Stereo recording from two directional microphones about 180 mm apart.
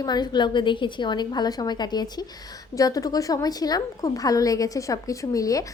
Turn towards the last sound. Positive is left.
turn(degrees=20)  # may be behind; listen again after turning